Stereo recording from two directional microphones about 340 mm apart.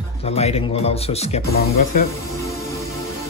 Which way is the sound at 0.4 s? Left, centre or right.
Centre.